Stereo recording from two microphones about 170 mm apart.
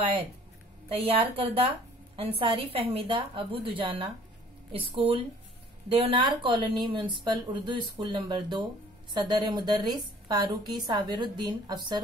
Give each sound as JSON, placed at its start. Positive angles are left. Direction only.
{"t": 0.8, "sound": "a woman's voice", "side_deg": -35}